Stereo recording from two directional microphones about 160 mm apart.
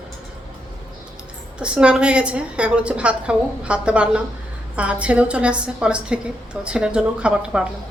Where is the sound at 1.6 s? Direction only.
5° right (ahead or behind).